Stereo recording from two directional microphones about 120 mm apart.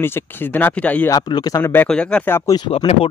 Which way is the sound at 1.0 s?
35° left (ahead or behind).